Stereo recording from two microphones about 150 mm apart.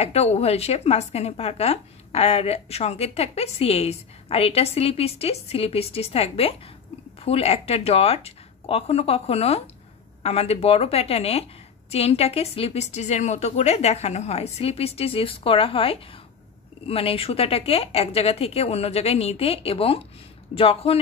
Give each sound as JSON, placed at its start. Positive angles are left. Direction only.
{"t": 0.0, "sound": "a woman's voice", "side_deg": 45}